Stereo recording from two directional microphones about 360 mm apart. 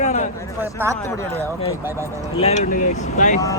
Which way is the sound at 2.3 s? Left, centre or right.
Centre.